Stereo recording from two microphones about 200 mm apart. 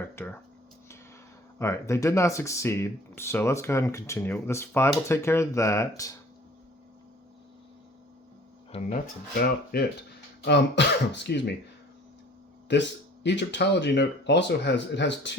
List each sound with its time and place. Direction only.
1.5 s speech: 15° left (ahead or behind)
8.7 s speech: 30° left (ahead or behind)
9.7 s speech: 50° left (ahead or behind)
12.7 s speech: 60° left (ahead or behind)